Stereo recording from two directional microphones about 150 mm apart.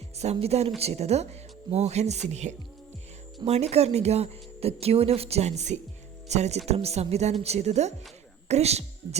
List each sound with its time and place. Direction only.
0.2 s speech: 45° right (ahead or behind)